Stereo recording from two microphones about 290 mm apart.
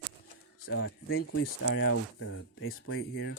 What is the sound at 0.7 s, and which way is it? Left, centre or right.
Speech, left.